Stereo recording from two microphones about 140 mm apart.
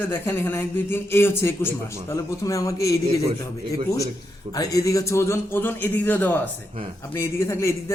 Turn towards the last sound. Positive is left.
turn(degrees=20)  # may be behind; listen again after turning